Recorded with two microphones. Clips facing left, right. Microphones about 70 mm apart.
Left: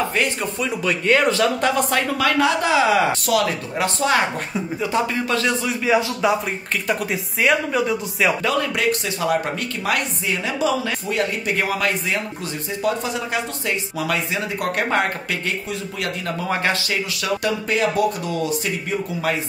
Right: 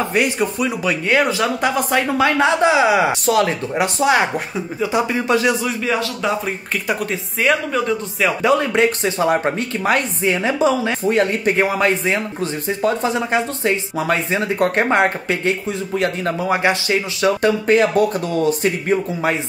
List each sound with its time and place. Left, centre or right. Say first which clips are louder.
0.1 s speech: right 4 dB; centre
2.1 s speech: right 4 dB; right
3.3 s speech: right 3 dB; right
3.8 s speech: right 3 dB; centre
4.6 s speech: right 2 dB; centre
5.1 s speech: right 4 dB; centre
6.2 s speech: left 1 dB; centre
8.4 s speech: right 6 dB; right
16.3 s speech: right 3 dB; centre; by 18.9 s right